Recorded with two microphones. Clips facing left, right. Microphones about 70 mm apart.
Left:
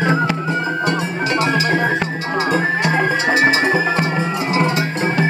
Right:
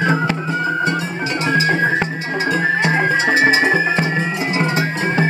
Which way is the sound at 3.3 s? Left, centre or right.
Right.